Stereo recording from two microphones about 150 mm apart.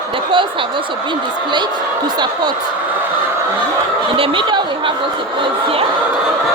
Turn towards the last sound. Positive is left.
turn(degrees=-35)  # may be behind; listen again after turning